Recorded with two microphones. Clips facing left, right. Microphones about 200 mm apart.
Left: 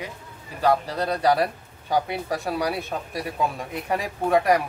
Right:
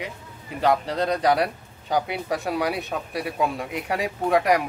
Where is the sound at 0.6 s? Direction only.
20° right (ahead or behind).